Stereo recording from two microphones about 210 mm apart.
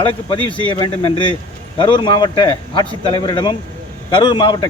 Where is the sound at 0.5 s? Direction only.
25° left (ahead or behind).